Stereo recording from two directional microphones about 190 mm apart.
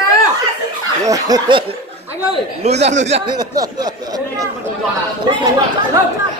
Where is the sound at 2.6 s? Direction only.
35° right (ahead or behind); by 3.9 s 20° right (ahead or behind).